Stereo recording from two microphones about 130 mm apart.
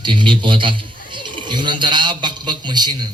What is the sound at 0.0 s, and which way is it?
A man's voice, 40° right (ahead or behind).